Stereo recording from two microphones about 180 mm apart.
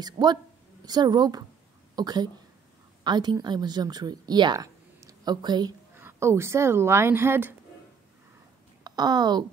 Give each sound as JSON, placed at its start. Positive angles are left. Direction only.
{"t": 0.0, "sound": "a woman's voice", "side_deg": -25}
{"t": 8.8, "sound": "a woman's voice", "side_deg": -25}